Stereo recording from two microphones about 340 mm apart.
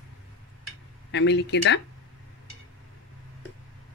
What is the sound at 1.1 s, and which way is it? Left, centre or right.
Speech, left.